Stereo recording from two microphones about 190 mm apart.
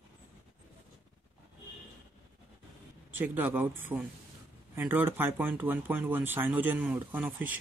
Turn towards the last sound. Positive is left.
turn(degrees=-10)  # may be behind; listen again after turning